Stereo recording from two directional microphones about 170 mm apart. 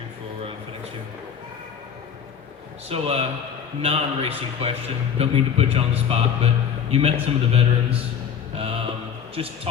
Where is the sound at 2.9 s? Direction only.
35° right (ahead or behind).